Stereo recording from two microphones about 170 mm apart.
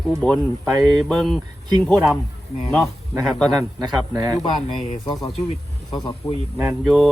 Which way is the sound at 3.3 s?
5° left (ahead or behind).